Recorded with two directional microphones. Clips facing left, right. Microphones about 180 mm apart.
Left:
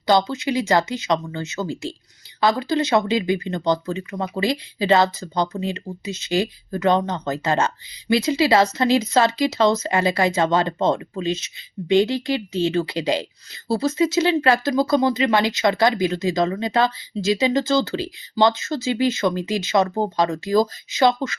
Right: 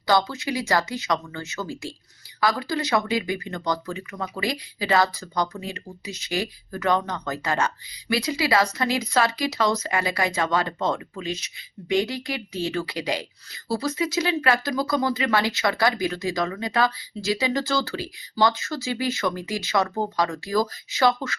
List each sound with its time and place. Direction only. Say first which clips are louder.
0.1 s speech: left 4 dB; 20° left (ahead or behind)